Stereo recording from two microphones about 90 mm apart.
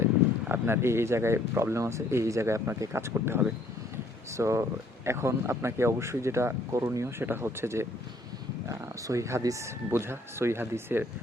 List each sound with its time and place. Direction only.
0.4 s speech: 25° right (ahead or behind)